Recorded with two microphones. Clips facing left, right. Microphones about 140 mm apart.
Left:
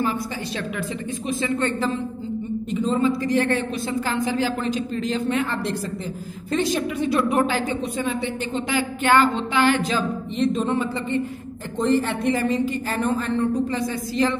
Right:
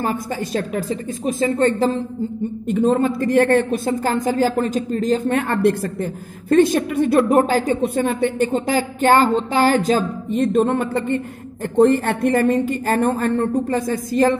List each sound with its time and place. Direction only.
0.7 s a woman's voice: 40° right (ahead or behind)
2.7 s a woman's voice: 55° right (ahead or behind); by 7.7 s 40° right (ahead or behind)
7.8 s a woman's voice: 55° right (ahead or behind)